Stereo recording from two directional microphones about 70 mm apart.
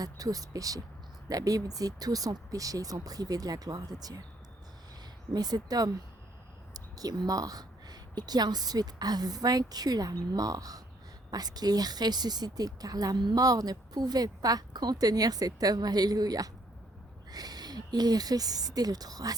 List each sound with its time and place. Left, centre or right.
0.0 s speech: right
5.3 s speech: right